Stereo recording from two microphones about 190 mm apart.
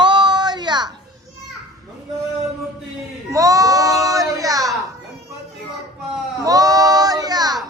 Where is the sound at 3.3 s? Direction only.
20° right (ahead or behind).